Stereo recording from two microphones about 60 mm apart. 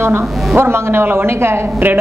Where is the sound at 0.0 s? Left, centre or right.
Right.